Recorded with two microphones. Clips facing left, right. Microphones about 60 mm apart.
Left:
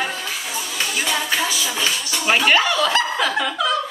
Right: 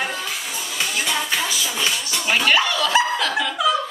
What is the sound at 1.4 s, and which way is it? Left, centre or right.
Music, left.